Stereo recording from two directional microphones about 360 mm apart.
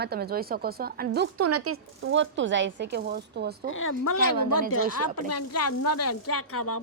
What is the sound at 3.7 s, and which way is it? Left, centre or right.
A woman's voice, left.